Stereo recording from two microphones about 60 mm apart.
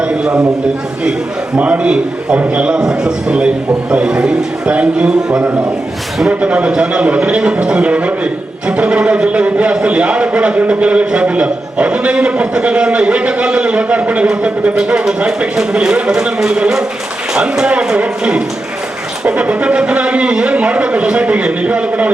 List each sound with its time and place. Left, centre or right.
0.0 s a man's voice: centre
1.5 s a man's voice: right